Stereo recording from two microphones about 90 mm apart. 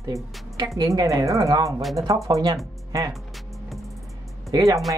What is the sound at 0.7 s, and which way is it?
Speech, 40° right (ahead or behind).